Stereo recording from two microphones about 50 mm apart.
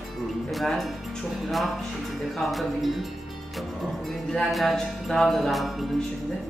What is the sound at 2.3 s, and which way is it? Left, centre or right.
Music, centre.